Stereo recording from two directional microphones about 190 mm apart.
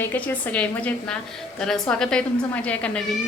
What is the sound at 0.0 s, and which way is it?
A woman's voice, 10° left (ahead or behind).